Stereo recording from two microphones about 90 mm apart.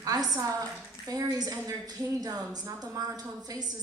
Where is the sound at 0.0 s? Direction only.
45° right (ahead or behind).